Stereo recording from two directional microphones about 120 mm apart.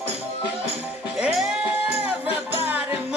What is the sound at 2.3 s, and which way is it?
Music, 15° right (ahead or behind).